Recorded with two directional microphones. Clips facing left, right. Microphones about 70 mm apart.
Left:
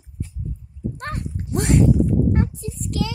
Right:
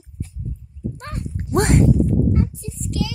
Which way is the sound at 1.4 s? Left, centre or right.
Right.